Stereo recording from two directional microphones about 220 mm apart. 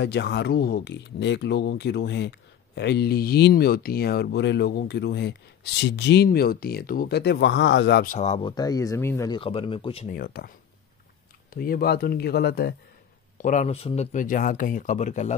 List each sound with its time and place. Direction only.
0.0 s speech: 50° left (ahead or behind); by 10.0 s 25° left (ahead or behind)
10.0 s speech: 45° left (ahead or behind)
11.5 s speech: 40° left (ahead or behind)
13.4 s speech: 35° left (ahead or behind)